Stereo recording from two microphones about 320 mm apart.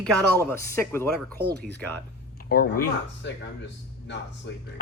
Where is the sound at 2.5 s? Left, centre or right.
Left.